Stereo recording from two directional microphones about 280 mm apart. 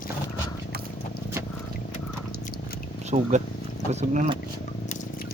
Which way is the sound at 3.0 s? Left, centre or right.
Right.